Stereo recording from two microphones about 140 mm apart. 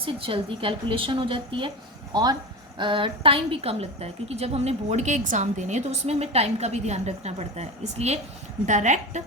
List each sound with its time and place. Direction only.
0.0 s a woman's voice: 40° right (ahead or behind); by 9.2 s 60° right (ahead or behind)